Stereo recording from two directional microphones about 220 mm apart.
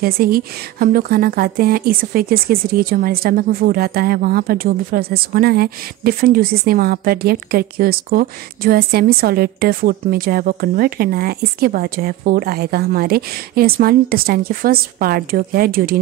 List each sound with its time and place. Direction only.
0.0 s speech: 40° right (ahead or behind)